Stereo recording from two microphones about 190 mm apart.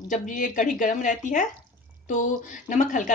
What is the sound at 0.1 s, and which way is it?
Speech, 40° left (ahead or behind).